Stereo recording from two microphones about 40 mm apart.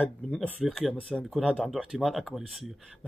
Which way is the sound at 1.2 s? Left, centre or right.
Centre.